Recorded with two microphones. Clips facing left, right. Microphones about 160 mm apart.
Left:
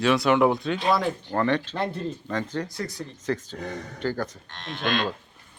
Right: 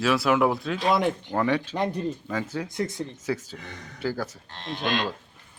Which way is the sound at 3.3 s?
10° right (ahead or behind).